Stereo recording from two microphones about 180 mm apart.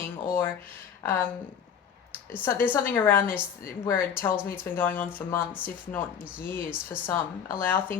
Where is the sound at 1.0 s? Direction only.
15° left (ahead or behind).